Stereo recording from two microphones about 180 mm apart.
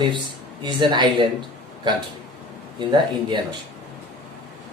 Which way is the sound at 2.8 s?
25° right (ahead or behind).